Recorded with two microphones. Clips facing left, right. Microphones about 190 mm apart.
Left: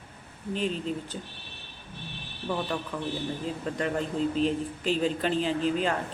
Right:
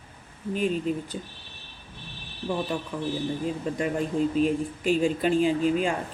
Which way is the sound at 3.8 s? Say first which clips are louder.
Right 2 dB; 10° right (ahead or behind).